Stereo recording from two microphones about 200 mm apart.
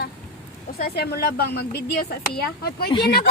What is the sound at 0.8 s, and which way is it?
Speech, 50° left (ahead or behind).